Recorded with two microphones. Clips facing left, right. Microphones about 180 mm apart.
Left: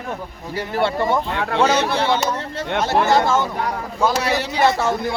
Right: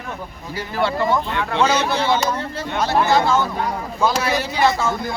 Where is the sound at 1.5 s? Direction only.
55° left (ahead or behind).